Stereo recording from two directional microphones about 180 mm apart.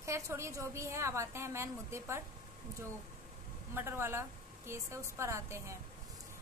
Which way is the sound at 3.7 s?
15° right (ahead or behind).